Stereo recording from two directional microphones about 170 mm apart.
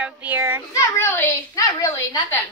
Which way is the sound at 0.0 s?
10° right (ahead or behind).